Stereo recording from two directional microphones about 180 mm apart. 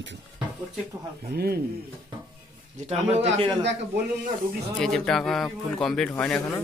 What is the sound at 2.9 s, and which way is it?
Speech, 35° right (ahead or behind).